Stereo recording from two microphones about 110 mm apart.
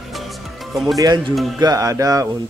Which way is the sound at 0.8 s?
35° right (ahead or behind).